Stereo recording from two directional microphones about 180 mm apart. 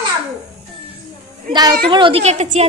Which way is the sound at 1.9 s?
25° right (ahead or behind).